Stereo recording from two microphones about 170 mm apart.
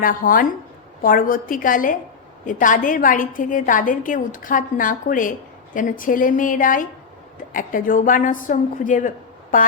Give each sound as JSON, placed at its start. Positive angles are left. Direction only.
{"t": 0.0, "sound": "a woman's voice", "side_deg": 55}